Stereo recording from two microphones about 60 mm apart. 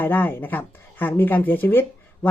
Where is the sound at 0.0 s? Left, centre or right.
Left.